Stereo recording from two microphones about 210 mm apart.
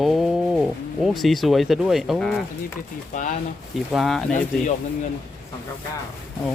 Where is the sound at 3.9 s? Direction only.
Centre (ahead or behind).